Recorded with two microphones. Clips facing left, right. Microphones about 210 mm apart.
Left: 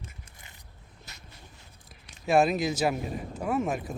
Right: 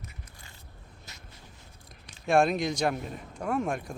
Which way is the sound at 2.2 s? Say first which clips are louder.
Left 1 dB; 5° left (ahead or behind).